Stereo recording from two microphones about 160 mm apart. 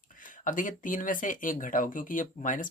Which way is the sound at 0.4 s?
55° left (ahead or behind).